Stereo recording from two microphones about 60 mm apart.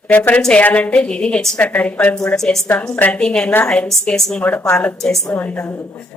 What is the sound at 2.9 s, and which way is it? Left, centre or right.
Speech, left.